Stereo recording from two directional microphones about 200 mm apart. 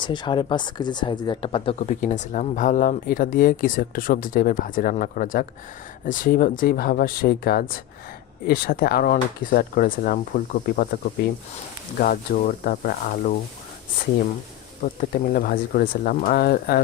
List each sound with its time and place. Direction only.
0.0 s speech: 25° left (ahead or behind)
2.0 s speech: 40° left (ahead or behind)
11.9 s speech: 45° left (ahead or behind)
15.1 s speech: 45° left (ahead or behind)